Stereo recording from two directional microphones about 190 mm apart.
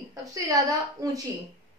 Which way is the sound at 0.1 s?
20° right (ahead or behind).